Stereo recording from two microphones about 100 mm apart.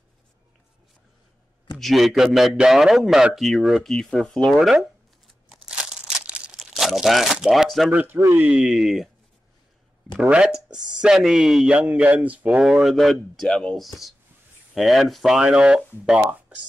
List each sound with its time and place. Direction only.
1.8 s speech: centre (ahead or behind)
5.7 s crumpling: 10° right (ahead or behind)
7.3 s speech: 5° right (ahead or behind)
7.9 s speech: 15° right (ahead or behind)
10.3 s speech: 5° right (ahead or behind)